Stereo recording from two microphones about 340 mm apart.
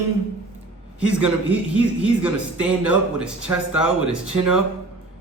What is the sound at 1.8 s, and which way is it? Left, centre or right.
A man's voice, centre.